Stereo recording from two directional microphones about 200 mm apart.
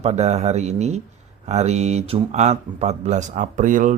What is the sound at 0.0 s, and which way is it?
Speech, 35° right (ahead or behind).